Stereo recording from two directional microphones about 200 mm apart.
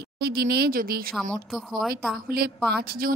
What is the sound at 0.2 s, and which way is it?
Speech, 50° right (ahead or behind).